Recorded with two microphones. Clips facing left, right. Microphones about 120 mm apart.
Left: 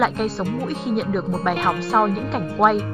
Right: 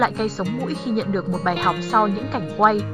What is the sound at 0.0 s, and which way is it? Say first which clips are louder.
Speech: even; centre (ahead or behind).